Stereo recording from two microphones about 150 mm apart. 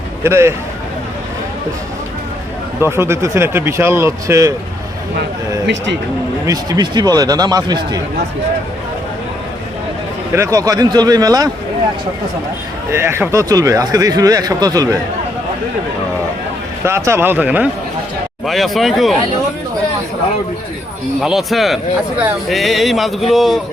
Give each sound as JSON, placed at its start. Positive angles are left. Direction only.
{"t": 0.2, "sound": "speech", "side_deg": -15}
{"t": 2.8, "sound": "speech", "side_deg": -15}
{"t": 6.4, "sound": "speech", "side_deg": -25}
{"t": 10.3, "sound": "speech", "side_deg": -20}
{"t": 12.9, "sound": "speech", "side_deg": -15}
{"t": 16.8, "sound": "speech", "side_deg": -15}
{"t": 18.4, "sound": "music", "side_deg": 0}
{"t": 21.2, "sound": "music", "side_deg": 0}